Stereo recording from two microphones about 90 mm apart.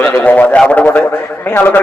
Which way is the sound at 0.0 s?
20° left (ahead or behind).